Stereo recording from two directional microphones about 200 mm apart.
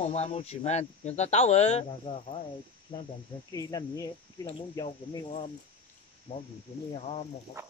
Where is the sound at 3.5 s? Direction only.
15° left (ahead or behind).